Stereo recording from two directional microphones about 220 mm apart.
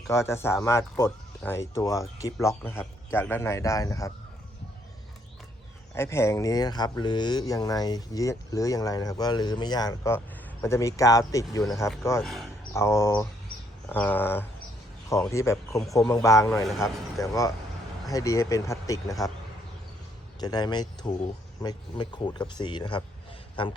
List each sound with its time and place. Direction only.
0.1 s speech: 10° left (ahead or behind)
5.9 s speech: 10° left (ahead or behind)
12.2 s speech: centre (ahead or behind)
12.7 s speech: 10° left (ahead or behind)
16.6 s speech: centre (ahead or behind)
18.1 s speech: 15° left (ahead or behind)
20.4 s speech: 20° left (ahead or behind)